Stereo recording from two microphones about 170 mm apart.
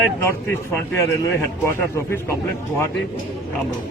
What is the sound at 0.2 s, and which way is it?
Speech, 15° left (ahead or behind).